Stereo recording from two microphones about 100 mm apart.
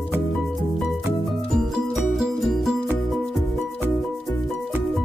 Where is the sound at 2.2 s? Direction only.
Centre (ahead or behind).